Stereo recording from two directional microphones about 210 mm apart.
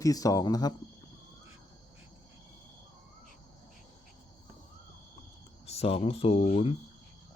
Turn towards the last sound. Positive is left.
turn(degrees=30)  # may be behind; listen again after turning